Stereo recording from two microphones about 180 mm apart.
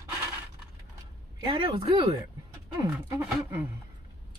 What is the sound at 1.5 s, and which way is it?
Speech, 25° right (ahead or behind).